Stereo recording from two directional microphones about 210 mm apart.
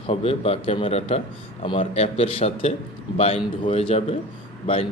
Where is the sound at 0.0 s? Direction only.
30° left (ahead or behind).